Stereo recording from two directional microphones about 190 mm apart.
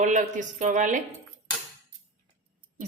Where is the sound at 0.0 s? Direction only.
40° right (ahead or behind).